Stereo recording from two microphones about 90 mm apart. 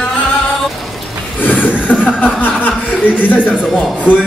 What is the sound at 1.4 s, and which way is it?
Speech, 20° left (ahead or behind).